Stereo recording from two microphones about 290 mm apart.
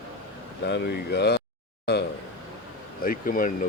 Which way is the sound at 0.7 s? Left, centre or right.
Left.